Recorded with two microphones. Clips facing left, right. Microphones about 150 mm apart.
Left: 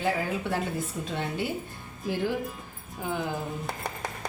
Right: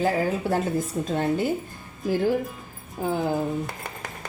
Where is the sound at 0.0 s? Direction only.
40° right (ahead or behind).